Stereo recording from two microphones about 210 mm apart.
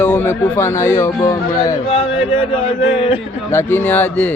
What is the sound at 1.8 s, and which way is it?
Music, 25° left (ahead or behind).